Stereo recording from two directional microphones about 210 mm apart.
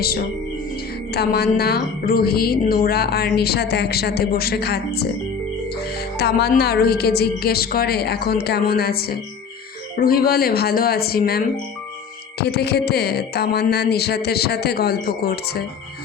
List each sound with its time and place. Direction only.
1.1 s a woman's voice: 50° left (ahead or behind)
6.1 s a woman's voice: 50° left (ahead or behind)